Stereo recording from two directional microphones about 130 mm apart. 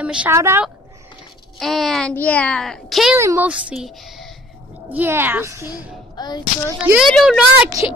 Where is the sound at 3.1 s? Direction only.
20° right (ahead or behind).